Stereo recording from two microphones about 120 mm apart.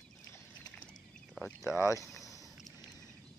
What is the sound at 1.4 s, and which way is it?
Speech, 5° left (ahead or behind).